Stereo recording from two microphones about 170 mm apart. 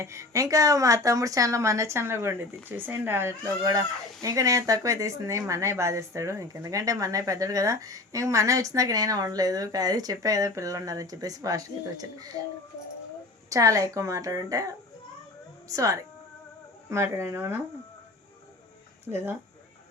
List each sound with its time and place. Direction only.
0.0 s speech: 15° right (ahead or behind)
13.5 s speech: 20° right (ahead or behind)
15.6 s speech: 20° right (ahead or behind)
19.0 s speech: 10° right (ahead or behind)